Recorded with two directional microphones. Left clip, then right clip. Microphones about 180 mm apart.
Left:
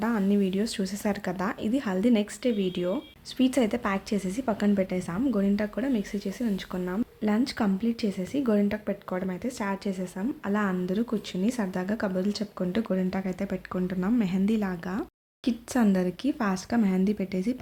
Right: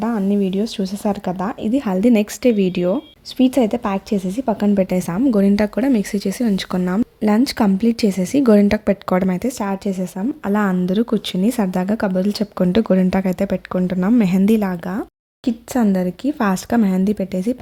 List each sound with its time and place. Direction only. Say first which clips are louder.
0.0 s speech: right 7 dB; 25° right (ahead or behind)
4.8 s speech: right 10 dB; 50° right (ahead or behind)
15.4 s speech: right 7 dB; 35° right (ahead or behind)
16.4 s speech: right 12 dB; 45° right (ahead or behind)